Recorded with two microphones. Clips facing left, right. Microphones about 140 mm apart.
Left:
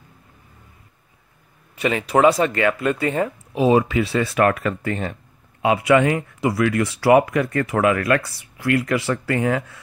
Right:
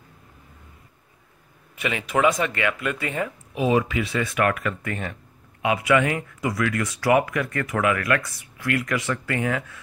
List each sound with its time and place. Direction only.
1.8 s speech: 35° left (ahead or behind)